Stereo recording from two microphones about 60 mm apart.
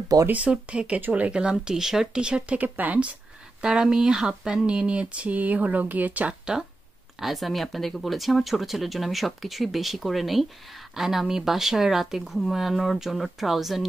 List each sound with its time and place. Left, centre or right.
0.3 s speech: right
2.6 s speech: right
3.6 s speech: centre
7.2 s speech: centre